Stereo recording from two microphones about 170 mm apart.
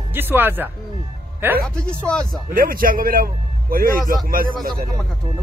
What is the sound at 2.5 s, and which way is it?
A man's voice, 55° right (ahead or behind).